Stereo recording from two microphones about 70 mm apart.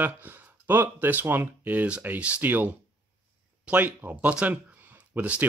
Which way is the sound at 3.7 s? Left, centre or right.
Right.